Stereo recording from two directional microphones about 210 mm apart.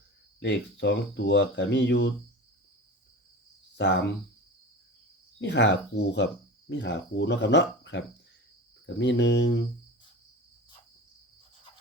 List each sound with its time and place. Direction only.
0.3 s speech: 55° left (ahead or behind)
3.8 s speech: 55° left (ahead or behind)
5.4 s speech: 55° left (ahead or behind)